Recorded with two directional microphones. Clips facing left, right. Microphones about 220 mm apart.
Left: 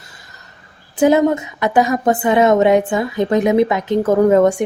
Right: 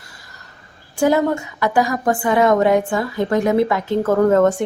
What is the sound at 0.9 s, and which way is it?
A woman's voice, 20° left (ahead or behind).